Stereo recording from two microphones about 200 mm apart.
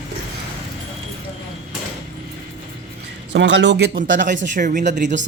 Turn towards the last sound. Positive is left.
turn(degrees=-40)  # may be behind; listen again after turning